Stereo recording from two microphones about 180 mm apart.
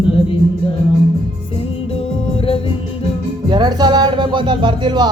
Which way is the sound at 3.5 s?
25° right (ahead or behind).